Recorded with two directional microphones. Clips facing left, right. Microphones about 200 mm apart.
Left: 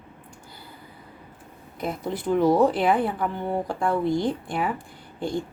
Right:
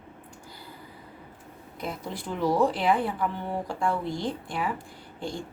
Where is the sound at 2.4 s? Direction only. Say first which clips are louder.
Left 3 dB; 55° left (ahead or behind).